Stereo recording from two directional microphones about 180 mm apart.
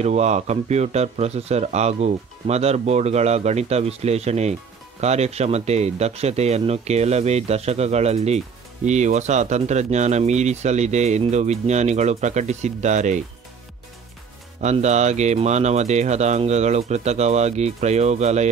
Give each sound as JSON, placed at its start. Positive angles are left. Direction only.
{"t": 0.0, "sound": "speech", "side_deg": -40}
{"t": 14.6, "sound": "speech", "side_deg": -40}